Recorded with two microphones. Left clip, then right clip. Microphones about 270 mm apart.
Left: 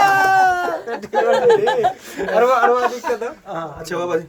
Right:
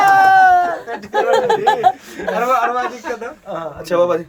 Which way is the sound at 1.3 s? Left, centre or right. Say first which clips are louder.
Even; right.